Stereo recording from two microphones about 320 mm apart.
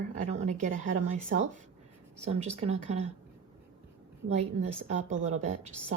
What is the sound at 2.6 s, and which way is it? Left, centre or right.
Speech, centre.